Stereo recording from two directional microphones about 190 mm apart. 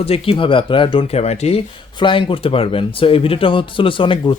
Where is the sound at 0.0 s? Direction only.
30° left (ahead or behind).